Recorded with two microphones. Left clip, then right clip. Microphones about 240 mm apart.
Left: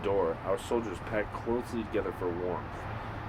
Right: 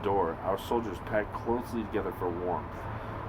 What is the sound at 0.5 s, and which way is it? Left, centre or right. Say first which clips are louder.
Speech: even; right.